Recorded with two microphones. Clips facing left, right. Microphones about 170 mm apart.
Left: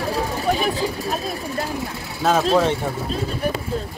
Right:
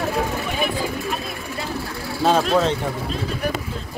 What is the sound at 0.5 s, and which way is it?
Vehicle, 40° left (ahead or behind).